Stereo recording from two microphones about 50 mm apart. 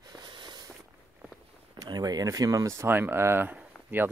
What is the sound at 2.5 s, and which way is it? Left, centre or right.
Speech, right.